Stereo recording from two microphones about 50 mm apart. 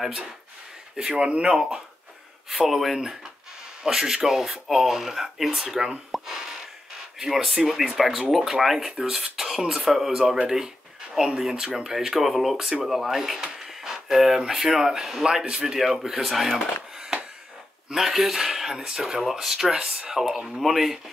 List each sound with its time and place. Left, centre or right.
0.9 s speech: centre
2.5 s speech: centre
6.1 s a sound: centre
7.2 s speech: centre
17.9 s speech: centre